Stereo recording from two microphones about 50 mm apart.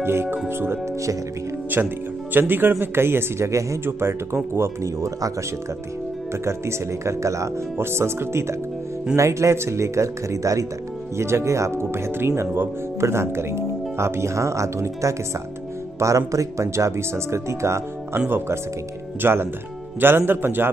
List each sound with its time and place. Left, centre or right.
0.0 s a man's voice: right
1.7 s a man's voice: right
3.4 s speech: right
3.8 s speech: right
4.6 s speech: right
6.3 s speech: right
7.7 s speech: right
9.1 s speech: right
11.1 s speech: right
19.2 s a man's voice: right